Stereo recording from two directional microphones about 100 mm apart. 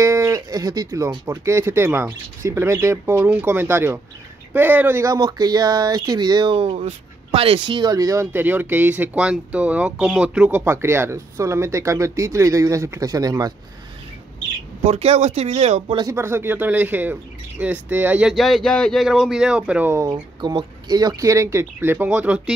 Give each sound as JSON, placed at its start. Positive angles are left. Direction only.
{"t": 0.0, "sound": "a sound", "side_deg": -30}
{"t": 1.2, "sound": "speech", "side_deg": -30}
{"t": 6.5, "sound": "speech", "side_deg": -70}
{"t": 7.9, "sound": "speech", "side_deg": -35}
{"t": 10.6, "sound": "speech", "side_deg": -25}
{"t": 14.9, "sound": "speech", "side_deg": -90}
{"t": 16.1, "sound": "speech", "side_deg": -25}
{"t": 18.3, "sound": "speech", "side_deg": 0}
{"t": 19.9, "sound": "speech", "side_deg": -30}
{"t": 20.3, "sound": "speech", "side_deg": -45}
{"t": 21.9, "sound": "speech", "side_deg": -15}